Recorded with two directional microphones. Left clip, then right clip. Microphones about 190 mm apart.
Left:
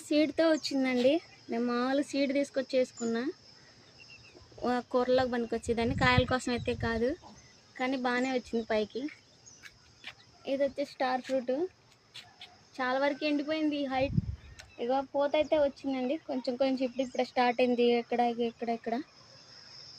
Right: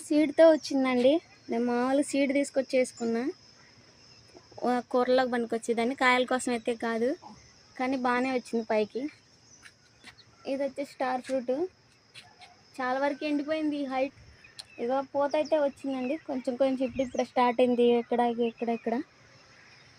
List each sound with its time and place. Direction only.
0.1 s speech: 35° right (ahead or behind)
4.6 s speech: 30° right (ahead or behind)
10.4 s speech: 30° right (ahead or behind)
12.7 s speech: 25° right (ahead or behind); by 19.0 s 40° right (ahead or behind)